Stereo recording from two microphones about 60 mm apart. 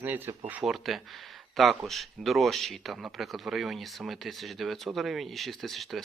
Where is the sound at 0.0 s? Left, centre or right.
Right.